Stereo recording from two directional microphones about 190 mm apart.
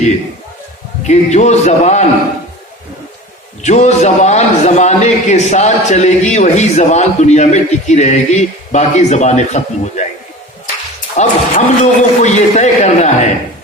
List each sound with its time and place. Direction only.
1.0 s a man's voice: 35° left (ahead or behind)
3.6 s a man's voice: 35° left (ahead or behind)
11.2 s a man's voice: 40° left (ahead or behind)